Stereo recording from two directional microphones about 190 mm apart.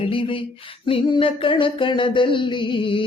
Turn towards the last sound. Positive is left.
turn(degrees=25)  # may be behind; listen again after turning